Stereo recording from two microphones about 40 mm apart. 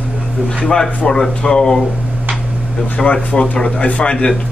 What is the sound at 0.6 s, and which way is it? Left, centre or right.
Speech, centre.